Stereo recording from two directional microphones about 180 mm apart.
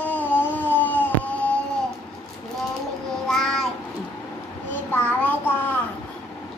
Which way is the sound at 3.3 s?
Centre (ahead or behind).